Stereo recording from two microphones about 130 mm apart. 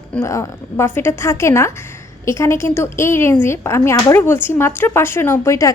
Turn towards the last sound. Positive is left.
turn(degrees=25)  # may be behind; listen again after turning